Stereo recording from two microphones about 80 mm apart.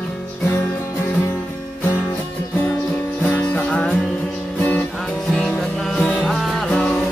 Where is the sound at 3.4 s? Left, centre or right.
Centre.